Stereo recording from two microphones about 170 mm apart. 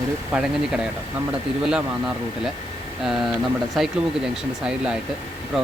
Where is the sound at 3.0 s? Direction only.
Centre (ahead or behind).